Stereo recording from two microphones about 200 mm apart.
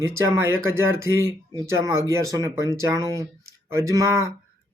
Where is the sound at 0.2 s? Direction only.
15° right (ahead or behind).